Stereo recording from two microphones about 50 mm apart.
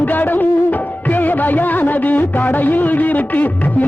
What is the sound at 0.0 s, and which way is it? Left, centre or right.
Music, left.